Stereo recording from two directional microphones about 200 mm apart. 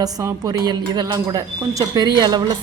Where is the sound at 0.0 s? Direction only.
15° right (ahead or behind).